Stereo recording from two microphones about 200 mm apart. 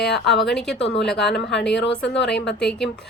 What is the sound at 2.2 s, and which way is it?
Speech, 60° left (ahead or behind).